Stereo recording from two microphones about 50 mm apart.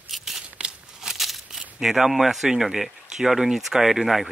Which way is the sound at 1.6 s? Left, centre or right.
Centre.